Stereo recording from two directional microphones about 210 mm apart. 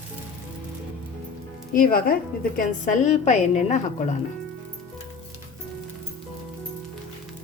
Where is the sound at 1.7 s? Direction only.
45° left (ahead or behind).